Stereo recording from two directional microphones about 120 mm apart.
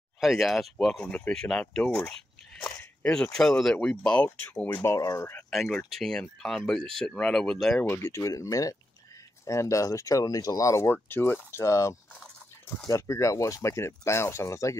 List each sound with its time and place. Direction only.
0.2 s speech: centre (ahead or behind); by 5.3 s 25° left (ahead or behind)
5.5 s speech: 5° left (ahead or behind)
7.8 s speech: 20° left (ahead or behind)